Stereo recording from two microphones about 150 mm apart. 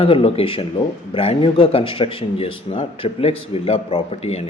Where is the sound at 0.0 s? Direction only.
40° left (ahead or behind).